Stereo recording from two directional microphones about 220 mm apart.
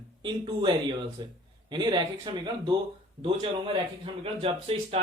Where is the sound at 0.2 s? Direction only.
20° right (ahead or behind).